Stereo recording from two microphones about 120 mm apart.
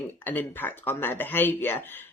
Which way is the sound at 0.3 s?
15° left (ahead or behind).